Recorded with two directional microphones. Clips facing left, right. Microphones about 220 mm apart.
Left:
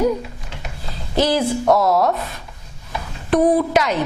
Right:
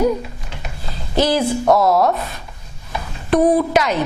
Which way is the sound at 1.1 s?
10° right (ahead or behind).